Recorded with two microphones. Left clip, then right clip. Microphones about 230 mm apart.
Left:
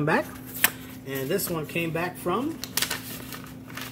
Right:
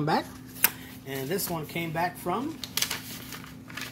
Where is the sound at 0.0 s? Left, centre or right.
Centre.